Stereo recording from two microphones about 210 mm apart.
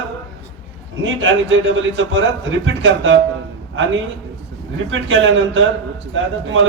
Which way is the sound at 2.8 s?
65° right (ahead or behind).